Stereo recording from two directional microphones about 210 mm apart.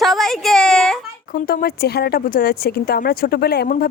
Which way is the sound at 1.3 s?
45° left (ahead or behind).